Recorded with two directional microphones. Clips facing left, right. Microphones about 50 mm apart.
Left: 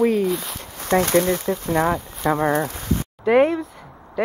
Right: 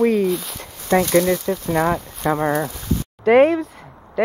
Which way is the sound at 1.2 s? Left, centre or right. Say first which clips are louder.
Right 2 dB; left.